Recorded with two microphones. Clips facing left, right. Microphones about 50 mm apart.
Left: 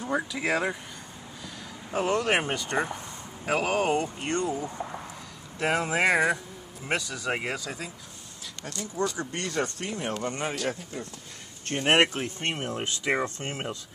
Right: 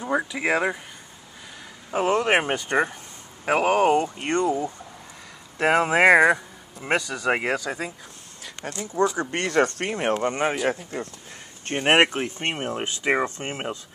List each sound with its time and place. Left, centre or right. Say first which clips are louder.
0.1 s speech: right 4 dB; right
1.9 s speech: right 4 dB; right
4.2 s speech: right 6 dB; right
8.6 s speech: right 7 dB; right
9.3 s speech: right 8 dB; right
10.1 s speech: right 7 dB; right
10.9 s speech: right 6 dB; right
11.6 s speech: right 4 dB; right